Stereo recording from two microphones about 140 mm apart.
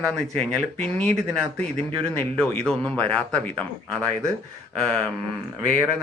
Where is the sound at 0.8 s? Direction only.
10° left (ahead or behind).